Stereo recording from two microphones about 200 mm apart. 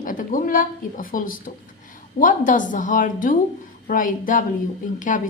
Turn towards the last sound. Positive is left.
turn(degrees=40)  # may be behind; listen again after turning